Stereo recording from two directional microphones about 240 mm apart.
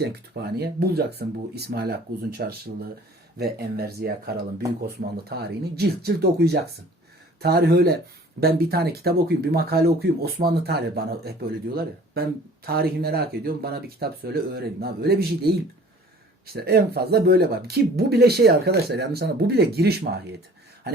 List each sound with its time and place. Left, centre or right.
0.0 s speech: right